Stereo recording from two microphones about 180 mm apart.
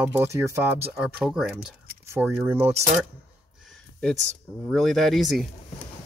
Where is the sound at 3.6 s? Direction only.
Centre (ahead or behind).